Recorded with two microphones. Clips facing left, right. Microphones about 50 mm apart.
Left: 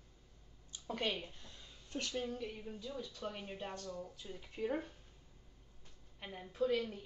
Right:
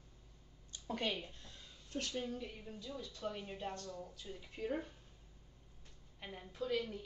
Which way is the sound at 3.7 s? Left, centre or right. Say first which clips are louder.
Left 1 dB; left.